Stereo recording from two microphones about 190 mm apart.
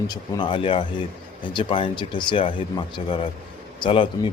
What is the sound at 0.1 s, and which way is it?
A man's voice, 25° left (ahead or behind).